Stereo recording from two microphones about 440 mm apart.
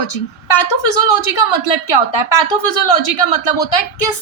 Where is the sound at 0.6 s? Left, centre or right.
Left.